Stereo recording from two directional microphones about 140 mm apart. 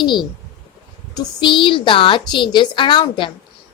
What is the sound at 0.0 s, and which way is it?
A woman's voice, 35° left (ahead or behind).